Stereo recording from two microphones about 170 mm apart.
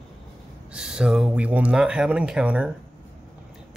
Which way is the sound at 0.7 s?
5° right (ahead or behind).